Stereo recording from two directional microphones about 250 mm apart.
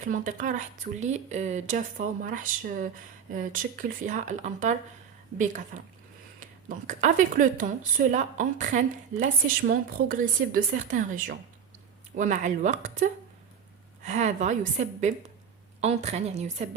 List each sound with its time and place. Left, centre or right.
0.0 s a woman's voice: right